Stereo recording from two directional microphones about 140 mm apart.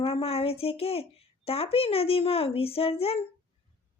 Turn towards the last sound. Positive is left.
turn(degrees=45)  # may be behind; listen again after turning